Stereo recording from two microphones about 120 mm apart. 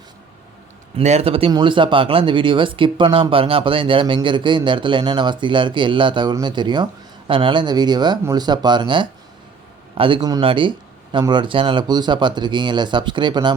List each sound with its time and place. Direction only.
0.9 s speech: 60° right (ahead or behind)
1.5 s speech: 40° right (ahead or behind)